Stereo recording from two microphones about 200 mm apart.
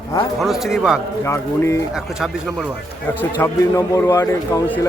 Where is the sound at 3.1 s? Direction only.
10° left (ahead or behind).